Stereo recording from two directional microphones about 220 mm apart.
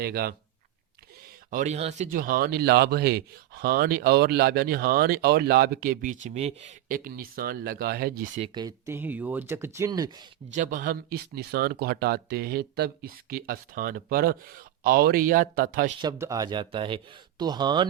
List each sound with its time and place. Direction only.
0.0 s speech: 45° right (ahead or behind)
1.5 s speech: 35° right (ahead or behind)
8.5 s speech: 15° right (ahead or behind)
10.5 s speech: 35° right (ahead or behind)
16.0 s speech: 15° right (ahead or behind)